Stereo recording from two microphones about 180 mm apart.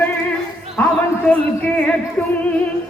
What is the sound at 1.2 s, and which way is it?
Speech, 5° left (ahead or behind).